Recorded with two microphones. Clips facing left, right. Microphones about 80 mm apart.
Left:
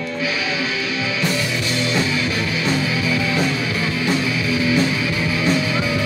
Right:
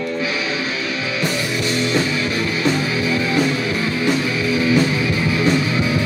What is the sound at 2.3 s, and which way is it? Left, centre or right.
Music, right.